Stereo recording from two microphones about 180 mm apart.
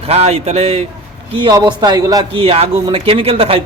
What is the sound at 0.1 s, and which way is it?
Speech, 35° right (ahead or behind).